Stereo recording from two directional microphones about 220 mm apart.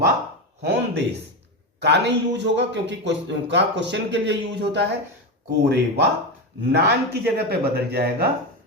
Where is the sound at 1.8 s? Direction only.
50° right (ahead or behind).